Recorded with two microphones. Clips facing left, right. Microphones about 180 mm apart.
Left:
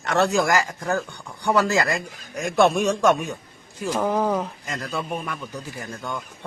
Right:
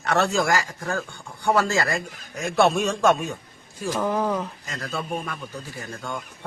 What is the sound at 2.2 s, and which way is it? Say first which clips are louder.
A man's voice: left 1 dB; 15° left (ahead or behind).